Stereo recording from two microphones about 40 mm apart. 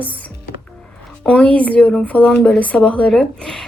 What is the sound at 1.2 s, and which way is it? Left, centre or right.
Speech, centre.